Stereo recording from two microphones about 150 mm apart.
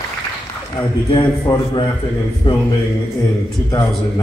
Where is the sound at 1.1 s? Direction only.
30° left (ahead or behind).